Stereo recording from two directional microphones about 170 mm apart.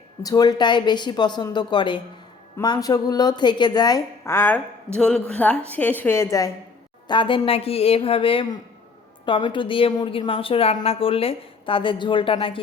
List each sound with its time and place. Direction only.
0.2 s a woman's voice: 20° left (ahead or behind)
7.1 s a woman's voice: 30° left (ahead or behind)